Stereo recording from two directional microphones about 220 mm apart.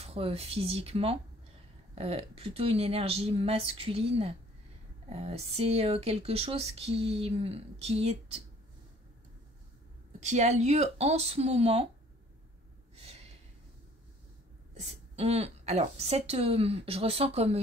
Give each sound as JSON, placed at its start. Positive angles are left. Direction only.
{"t": 0.0, "sound": "speech", "side_deg": -25}
{"t": 10.2, "sound": "speech", "side_deg": -30}
{"t": 14.7, "sound": "speech", "side_deg": -30}